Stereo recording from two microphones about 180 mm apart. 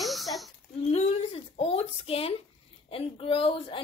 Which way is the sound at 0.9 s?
35° left (ahead or behind).